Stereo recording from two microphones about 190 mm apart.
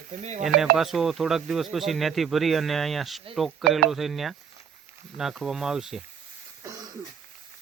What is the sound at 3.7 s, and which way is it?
Speech, 55° right (ahead or behind).